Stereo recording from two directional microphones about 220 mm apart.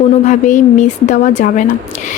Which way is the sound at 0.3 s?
35° left (ahead or behind).